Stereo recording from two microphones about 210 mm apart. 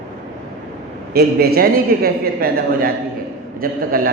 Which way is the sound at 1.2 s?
50° right (ahead or behind).